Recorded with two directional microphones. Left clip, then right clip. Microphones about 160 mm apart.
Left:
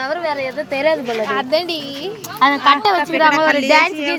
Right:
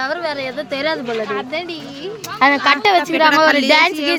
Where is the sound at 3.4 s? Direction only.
70° right (ahead or behind).